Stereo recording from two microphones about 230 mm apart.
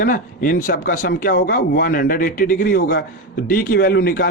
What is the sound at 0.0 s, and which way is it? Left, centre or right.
A man's voice, left.